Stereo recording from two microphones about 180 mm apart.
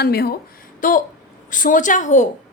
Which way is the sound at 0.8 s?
50° left (ahead or behind).